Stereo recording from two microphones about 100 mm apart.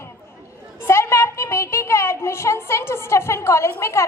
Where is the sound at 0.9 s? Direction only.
25° left (ahead or behind).